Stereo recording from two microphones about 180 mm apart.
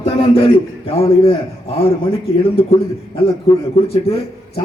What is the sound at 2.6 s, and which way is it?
Speech, 30° left (ahead or behind).